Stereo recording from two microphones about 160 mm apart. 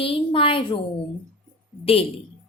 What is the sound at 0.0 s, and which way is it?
Speech, 35° left (ahead or behind).